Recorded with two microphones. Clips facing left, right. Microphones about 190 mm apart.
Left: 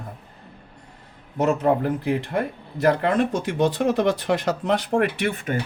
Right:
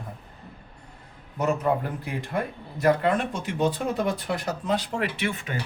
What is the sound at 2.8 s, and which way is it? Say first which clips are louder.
Speech: left 2 dB; 65° left (ahead or behind).